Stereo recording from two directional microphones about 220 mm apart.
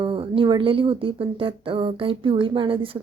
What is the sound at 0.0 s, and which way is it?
Speech, 25° right (ahead or behind).